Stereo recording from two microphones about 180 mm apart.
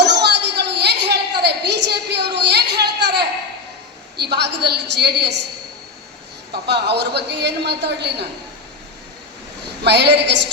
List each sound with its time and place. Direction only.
0.0 s a sound: 70° right (ahead or behind)
6.7 s a woman's voice: 65° right (ahead or behind)
9.8 s a woman's voice: 65° right (ahead or behind)